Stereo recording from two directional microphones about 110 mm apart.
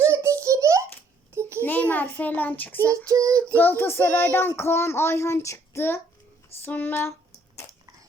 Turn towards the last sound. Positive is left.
turn(degrees=20)  # may be behind; listen again after turning